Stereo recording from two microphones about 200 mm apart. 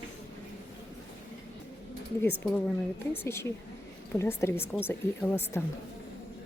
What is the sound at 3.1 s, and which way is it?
A woman's voice, 10° left (ahead or behind).